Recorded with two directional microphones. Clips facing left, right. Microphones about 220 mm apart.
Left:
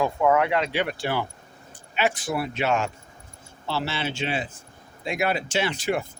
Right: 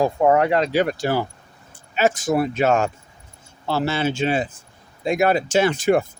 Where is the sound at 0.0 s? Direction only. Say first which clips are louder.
Right 4 dB; 40° right (ahead or behind).